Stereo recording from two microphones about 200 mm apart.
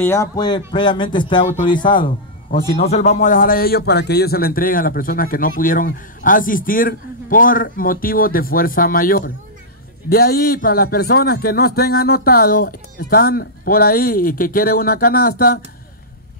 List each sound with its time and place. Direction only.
0.0 s speech: 15° left (ahead or behind)
2.7 s a man's voice: 30° left (ahead or behind); by 15.6 s 50° left (ahead or behind)